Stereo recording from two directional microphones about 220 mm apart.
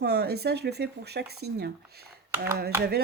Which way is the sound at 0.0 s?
50° right (ahead or behind).